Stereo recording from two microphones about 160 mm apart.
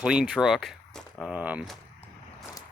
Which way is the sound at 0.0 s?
5° right (ahead or behind).